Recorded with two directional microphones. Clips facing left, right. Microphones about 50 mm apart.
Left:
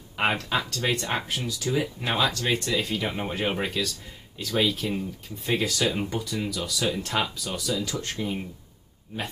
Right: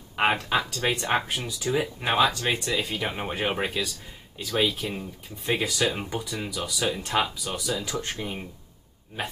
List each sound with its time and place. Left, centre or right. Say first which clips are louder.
0.1 s speech: right 2 dB; centre